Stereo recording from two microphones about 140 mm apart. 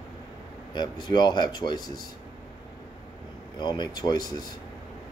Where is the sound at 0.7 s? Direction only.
30° left (ahead or behind).